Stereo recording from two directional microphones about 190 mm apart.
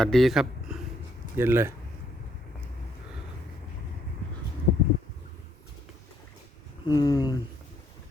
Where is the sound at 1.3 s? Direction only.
15° right (ahead or behind).